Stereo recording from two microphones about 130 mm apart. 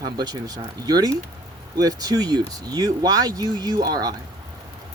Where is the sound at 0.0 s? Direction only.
30° right (ahead or behind).